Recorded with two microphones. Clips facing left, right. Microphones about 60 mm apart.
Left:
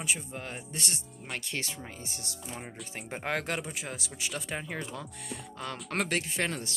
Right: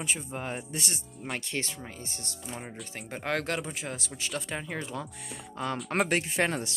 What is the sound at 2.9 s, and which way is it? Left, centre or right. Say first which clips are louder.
Speech: right 1 dB; centre.